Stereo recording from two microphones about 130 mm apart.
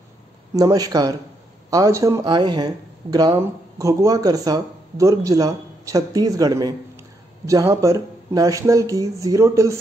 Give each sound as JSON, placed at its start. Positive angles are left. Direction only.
{"t": 0.6, "sound": "speech", "side_deg": -30}
{"t": 2.2, "sound": "speech", "side_deg": -35}